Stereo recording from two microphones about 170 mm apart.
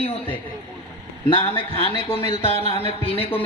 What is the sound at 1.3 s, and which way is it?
A man's voice, 35° left (ahead or behind).